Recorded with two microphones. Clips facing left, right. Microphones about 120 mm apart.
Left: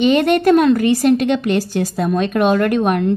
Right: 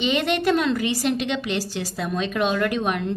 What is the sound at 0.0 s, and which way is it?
A woman's voice, 50° left (ahead or behind).